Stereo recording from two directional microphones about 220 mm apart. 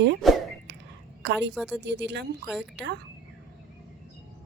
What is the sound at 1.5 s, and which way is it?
Speech, centre (ahead or behind).